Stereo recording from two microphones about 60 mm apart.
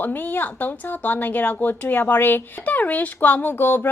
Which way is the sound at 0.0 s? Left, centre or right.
Left.